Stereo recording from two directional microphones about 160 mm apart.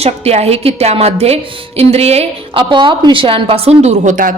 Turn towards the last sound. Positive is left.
turn(degrees=-55)  # may be behind; listen again after turning